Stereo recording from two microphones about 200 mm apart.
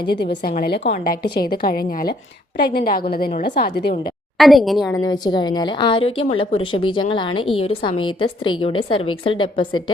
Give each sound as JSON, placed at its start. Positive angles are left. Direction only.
{"t": 0.4, "sound": "a woman's voice", "side_deg": 50}
{"t": 0.9, "sound": "a woman's voice", "side_deg": 45}
{"t": 4.4, "sound": "a woman's voice", "side_deg": 0}
{"t": 4.9, "sound": "a woman's voice", "side_deg": 20}